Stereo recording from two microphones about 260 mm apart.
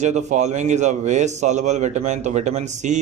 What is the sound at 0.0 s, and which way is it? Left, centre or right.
A man's voice, right.